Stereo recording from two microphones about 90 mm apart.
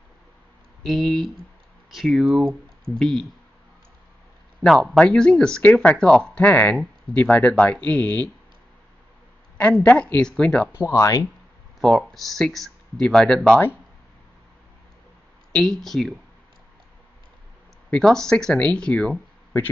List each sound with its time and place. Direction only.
0.8 s speech: centre (ahead or behind)
4.6 s speech: centre (ahead or behind)
9.6 s speech: 15° left (ahead or behind)
10.9 s speech: 40° left (ahead or behind)
11.8 s speech: centre (ahead or behind)
15.5 s speech: 5° left (ahead or behind)
17.9 s speech: 5° left (ahead or behind)